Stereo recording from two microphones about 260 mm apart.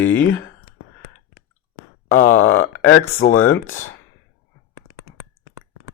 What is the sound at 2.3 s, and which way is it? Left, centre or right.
Speech, left.